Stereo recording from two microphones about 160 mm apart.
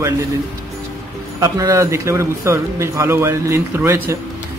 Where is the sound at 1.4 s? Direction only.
20° right (ahead or behind).